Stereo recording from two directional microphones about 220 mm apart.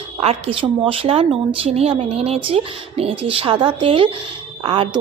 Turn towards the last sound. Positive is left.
turn(degrees=-25)  # may be behind; listen again after turning